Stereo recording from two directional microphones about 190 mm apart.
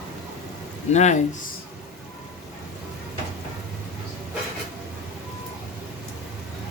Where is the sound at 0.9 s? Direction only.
35° left (ahead or behind).